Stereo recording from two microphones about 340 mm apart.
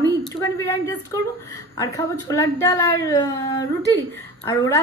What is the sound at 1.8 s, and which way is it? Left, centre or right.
A woman's voice, centre.